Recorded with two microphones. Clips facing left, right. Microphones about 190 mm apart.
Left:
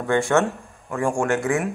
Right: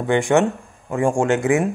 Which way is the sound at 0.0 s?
15° right (ahead or behind).